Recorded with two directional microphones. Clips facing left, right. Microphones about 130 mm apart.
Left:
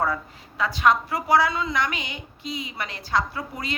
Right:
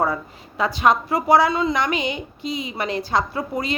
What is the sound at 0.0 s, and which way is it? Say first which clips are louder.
A woman's voice: right 3 dB; 20° right (ahead or behind).